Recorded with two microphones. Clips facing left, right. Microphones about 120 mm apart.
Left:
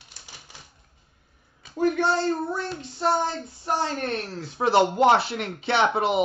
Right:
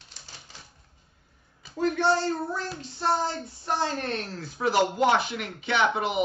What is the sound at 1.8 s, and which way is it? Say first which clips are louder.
Speech: left 1 dB; 20° left (ahead or behind).